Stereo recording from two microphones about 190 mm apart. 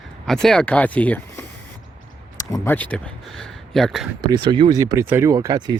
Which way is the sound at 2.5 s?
10° left (ahead or behind).